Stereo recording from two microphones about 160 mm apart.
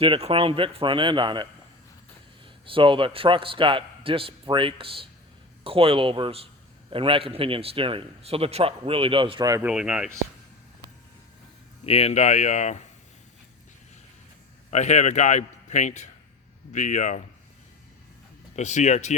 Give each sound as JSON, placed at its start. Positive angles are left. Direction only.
{"t": 0.0, "sound": "a man's voice", "side_deg": -35}
{"t": 2.6, "sound": "a man's voice", "side_deg": -30}
{"t": 9.6, "sound": "speech", "side_deg": -5}
{"t": 11.9, "sound": "a man's voice", "side_deg": 40}
{"t": 14.7, "sound": "a man's voice", "side_deg": 45}
{"t": 18.5, "sound": "a man's voice", "side_deg": 45}